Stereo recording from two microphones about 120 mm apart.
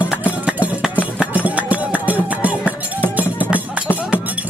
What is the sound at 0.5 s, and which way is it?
Music, 10° right (ahead or behind).